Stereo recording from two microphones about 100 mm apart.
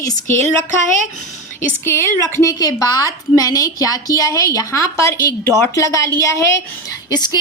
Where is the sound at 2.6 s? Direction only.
40° left (ahead or behind).